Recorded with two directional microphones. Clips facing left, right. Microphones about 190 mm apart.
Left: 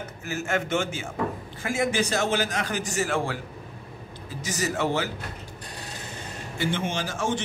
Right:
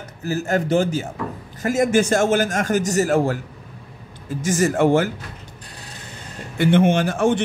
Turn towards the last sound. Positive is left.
turn(degrees=-60)  # may be behind; listen again after turning